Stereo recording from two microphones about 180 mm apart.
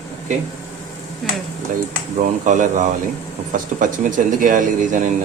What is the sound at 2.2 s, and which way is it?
Speech, 45° right (ahead or behind).